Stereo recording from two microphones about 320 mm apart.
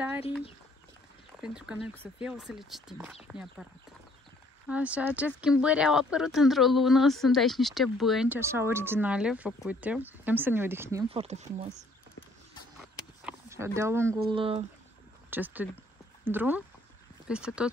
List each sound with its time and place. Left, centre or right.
1.4 s speech: centre
4.6 s speech: centre
13.2 s speech: centre
15.2 s speech: centre